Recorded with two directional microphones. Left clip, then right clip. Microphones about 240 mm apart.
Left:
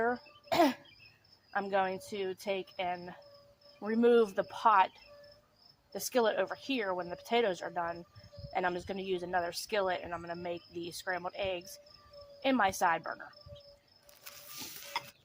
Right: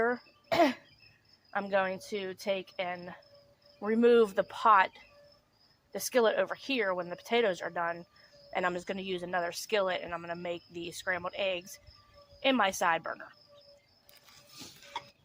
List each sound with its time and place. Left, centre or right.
0.0 s cough: right
1.5 s speech: right